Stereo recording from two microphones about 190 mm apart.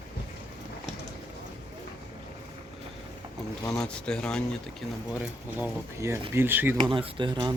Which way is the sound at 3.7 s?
5° left (ahead or behind).